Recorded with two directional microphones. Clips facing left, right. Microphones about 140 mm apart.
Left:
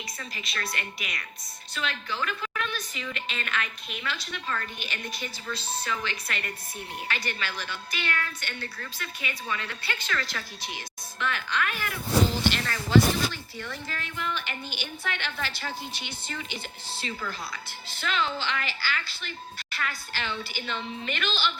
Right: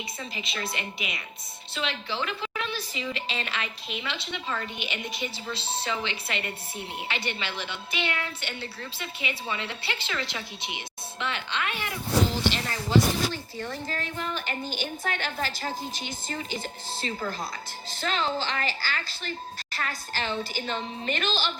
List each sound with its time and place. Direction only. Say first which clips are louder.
0.2 s speech: right 2 dB; 25° right (ahead or behind)
13.3 s a woman's voice: right 4 dB; 40° right (ahead or behind)